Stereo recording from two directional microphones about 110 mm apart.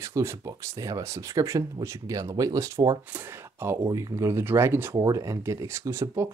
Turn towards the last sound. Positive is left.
turn(degrees=-25)  # may be behind; listen again after turning